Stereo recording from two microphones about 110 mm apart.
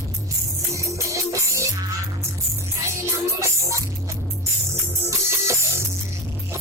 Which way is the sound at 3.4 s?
30° right (ahead or behind).